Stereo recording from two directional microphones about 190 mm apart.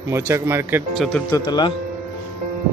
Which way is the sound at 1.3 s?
20° left (ahead or behind).